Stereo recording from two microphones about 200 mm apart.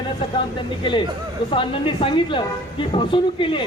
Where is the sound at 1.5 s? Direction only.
25° left (ahead or behind).